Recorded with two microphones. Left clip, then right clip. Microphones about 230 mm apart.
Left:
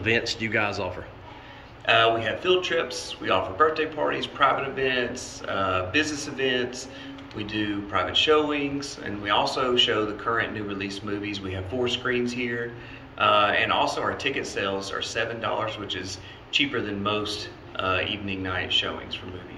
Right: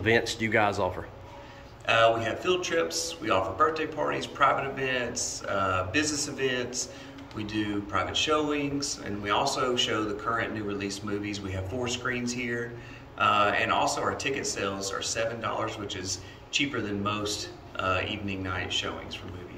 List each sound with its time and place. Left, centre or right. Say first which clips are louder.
0.0 s speech: left 1 dB; centre